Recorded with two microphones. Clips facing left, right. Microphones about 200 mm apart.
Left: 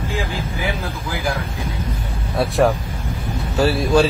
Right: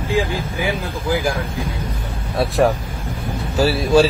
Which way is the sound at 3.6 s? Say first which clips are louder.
Right 1 dB; centre (ahead or behind).